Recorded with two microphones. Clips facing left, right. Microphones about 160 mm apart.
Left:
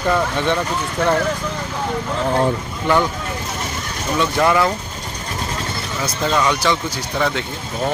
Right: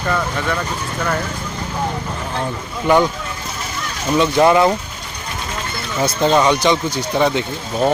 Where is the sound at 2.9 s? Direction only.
15° right (ahead or behind).